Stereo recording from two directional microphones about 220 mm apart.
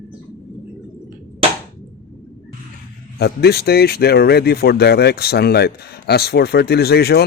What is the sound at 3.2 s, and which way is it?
Speech, 45° left (ahead or behind).